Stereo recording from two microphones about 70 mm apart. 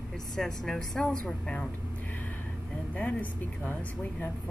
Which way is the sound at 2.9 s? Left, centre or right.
Left.